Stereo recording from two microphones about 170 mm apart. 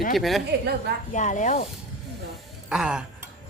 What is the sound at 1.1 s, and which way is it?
Speech, 45° left (ahead or behind).